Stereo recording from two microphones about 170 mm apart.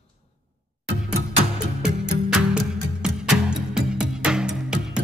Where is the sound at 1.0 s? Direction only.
5° right (ahead or behind).